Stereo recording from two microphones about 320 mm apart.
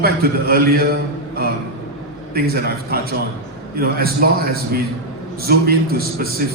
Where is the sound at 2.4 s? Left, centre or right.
Right.